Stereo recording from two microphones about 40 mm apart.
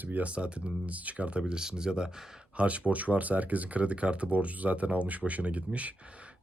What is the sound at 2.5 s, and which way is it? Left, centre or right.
Speech, right.